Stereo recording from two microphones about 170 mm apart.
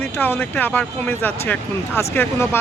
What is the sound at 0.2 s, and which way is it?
Speech, 10° left (ahead or behind).